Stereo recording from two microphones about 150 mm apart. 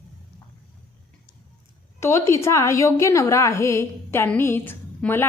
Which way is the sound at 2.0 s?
20° left (ahead or behind).